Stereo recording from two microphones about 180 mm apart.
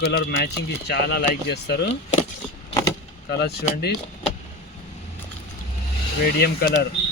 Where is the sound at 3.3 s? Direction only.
60° left (ahead or behind).